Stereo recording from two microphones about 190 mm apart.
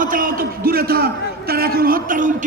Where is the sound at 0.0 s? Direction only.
45° right (ahead or behind).